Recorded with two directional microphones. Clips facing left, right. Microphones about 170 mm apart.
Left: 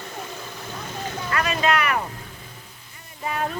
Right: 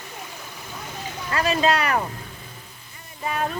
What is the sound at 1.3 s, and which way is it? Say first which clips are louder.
Speech: right 2 dB; 30° right (ahead or behind).